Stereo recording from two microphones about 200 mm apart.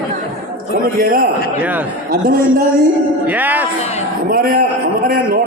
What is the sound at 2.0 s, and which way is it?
Speech, 45° right (ahead or behind).